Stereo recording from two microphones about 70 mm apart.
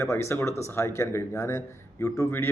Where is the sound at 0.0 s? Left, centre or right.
Left.